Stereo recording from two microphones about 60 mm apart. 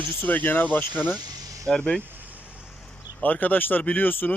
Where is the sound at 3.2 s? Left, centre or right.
Left.